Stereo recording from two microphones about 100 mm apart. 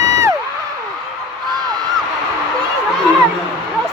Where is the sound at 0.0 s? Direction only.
35° right (ahead or behind).